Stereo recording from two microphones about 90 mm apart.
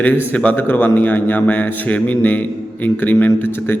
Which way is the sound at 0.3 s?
20° left (ahead or behind).